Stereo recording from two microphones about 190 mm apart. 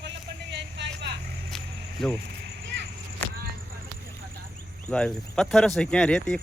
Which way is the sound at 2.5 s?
60° right (ahead or behind).